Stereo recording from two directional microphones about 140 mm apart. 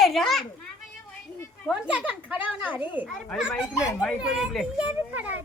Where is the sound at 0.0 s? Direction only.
Centre (ahead or behind).